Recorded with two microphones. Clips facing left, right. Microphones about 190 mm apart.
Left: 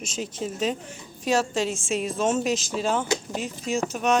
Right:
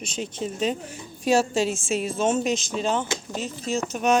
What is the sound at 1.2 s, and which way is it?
Speech, 10° right (ahead or behind).